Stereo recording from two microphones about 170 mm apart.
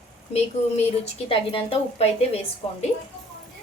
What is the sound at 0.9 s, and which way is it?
A woman's voice, 35° left (ahead or behind).